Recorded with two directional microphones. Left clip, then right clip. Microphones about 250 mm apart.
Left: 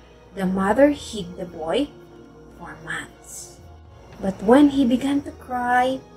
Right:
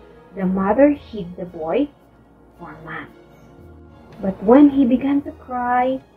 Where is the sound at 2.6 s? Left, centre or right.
Centre.